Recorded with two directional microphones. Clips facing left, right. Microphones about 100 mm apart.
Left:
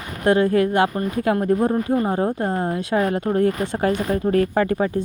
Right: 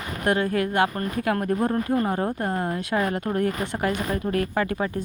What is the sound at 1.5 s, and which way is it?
Speech, 15° left (ahead or behind).